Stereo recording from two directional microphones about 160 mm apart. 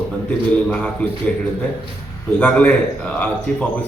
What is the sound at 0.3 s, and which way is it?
Speech, 10° left (ahead or behind).